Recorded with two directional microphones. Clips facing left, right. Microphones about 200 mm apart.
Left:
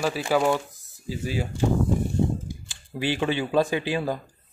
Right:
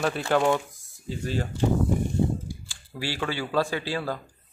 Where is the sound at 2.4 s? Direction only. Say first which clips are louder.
Left 1 dB; 20° left (ahead or behind).